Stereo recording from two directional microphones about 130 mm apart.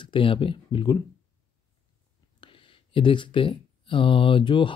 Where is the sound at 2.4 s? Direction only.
40° left (ahead or behind).